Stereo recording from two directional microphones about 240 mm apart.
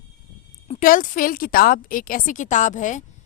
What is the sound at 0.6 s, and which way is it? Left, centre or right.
Speech, left.